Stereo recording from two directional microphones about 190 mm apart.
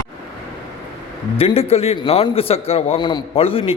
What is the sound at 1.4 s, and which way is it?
A man's voice, 30° left (ahead or behind).